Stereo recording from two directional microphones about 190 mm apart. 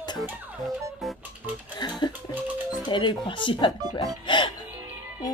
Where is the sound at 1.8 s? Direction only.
20° left (ahead or behind).